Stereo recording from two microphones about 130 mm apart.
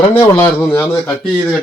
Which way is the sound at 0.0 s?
15° left (ahead or behind).